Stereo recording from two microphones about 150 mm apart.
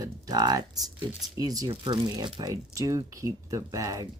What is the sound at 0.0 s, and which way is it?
Speech, 25° right (ahead or behind).